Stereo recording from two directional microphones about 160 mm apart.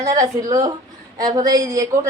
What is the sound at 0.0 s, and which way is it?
A woman's voice, 20° right (ahead or behind).